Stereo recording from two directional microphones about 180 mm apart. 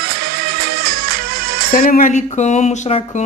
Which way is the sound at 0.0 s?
60° right (ahead or behind).